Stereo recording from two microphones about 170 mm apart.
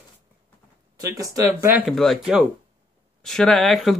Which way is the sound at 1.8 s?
Centre (ahead or behind).